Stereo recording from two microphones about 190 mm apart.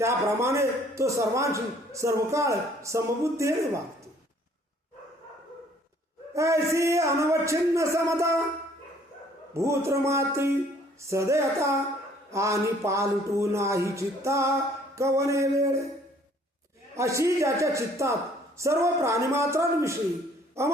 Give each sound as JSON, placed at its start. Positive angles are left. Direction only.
{"t": 0.0, "sound": "a man's voice", "side_deg": -15}
{"t": 6.3, "sound": "a man's voice", "side_deg": -15}
{"t": 9.6, "sound": "a man's voice", "side_deg": -15}
{"t": 16.9, "sound": "a man's voice", "side_deg": -15}